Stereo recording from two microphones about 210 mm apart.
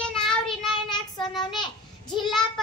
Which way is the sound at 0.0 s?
5° left (ahead or behind).